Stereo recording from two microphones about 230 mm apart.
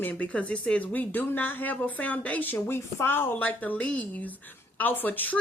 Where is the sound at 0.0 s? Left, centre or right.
Centre.